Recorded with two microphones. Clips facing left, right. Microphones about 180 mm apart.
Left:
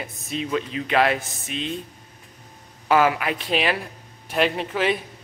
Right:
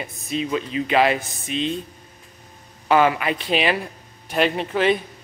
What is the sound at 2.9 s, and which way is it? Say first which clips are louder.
Speech: right 2 dB; 5° left (ahead or behind).